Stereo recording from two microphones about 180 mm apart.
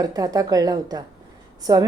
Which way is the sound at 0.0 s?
20° right (ahead or behind).